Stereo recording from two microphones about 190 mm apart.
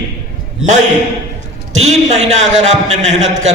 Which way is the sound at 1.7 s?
35° right (ahead or behind).